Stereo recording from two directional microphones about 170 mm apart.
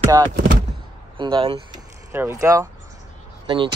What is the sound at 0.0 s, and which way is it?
Speech, 20° right (ahead or behind).